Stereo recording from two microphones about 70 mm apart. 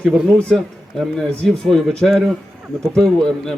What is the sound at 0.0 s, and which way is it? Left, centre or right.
A man's voice, centre.